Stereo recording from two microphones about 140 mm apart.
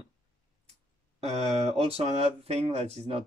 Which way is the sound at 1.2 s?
50° right (ahead or behind).